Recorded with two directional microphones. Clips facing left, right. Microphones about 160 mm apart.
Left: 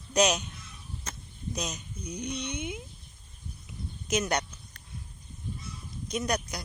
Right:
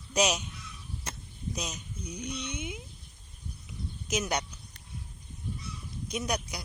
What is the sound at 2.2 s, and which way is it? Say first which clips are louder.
Speech: left 3 dB; 60° left (ahead or behind).